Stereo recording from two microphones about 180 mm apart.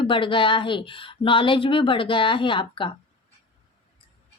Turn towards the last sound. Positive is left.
turn(degrees=25)  # may be behind; listen again after turning